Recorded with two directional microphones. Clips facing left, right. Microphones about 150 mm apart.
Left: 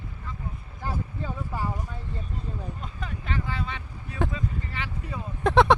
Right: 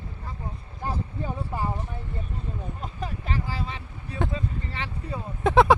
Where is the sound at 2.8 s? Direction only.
35° right (ahead or behind).